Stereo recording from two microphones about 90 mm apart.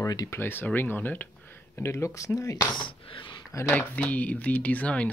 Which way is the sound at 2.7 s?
70° left (ahead or behind).